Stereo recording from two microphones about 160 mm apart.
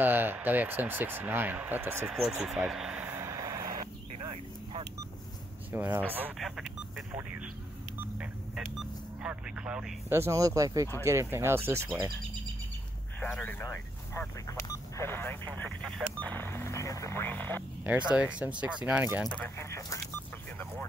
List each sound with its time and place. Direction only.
0.0 s speech: 10° right (ahead or behind)
2.2 s vehicle: 5° right (ahead or behind); by 3.6 s 20° right (ahead or behind)
5.7 s speech: 10° right (ahead or behind)
8.2 s speech: 5° right (ahead or behind)
10.1 s speech: 20° right (ahead or behind)
13.2 s speech: 10° left (ahead or behind)
17.8 s speech: 5° right (ahead or behind)